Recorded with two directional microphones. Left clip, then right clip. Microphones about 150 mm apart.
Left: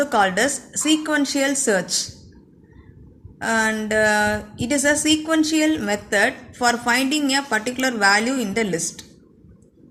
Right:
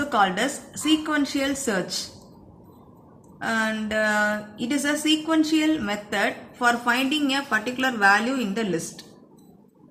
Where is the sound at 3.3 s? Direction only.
40° left (ahead or behind).